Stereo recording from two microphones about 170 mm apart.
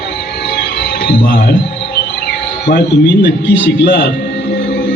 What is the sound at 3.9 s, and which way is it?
Speech, 75° left (ahead or behind).